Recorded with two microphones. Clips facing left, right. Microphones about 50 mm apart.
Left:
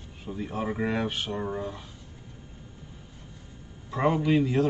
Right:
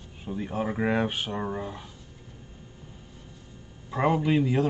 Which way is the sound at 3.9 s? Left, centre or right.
Centre.